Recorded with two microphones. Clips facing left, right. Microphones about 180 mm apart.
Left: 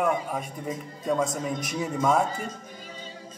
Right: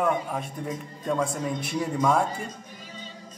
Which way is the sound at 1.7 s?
5° left (ahead or behind).